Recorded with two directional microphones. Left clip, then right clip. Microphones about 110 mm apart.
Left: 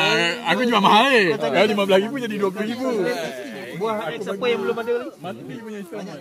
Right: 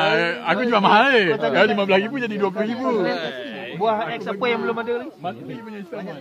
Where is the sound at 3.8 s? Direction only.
60° right (ahead or behind); by 6.0 s 40° right (ahead or behind).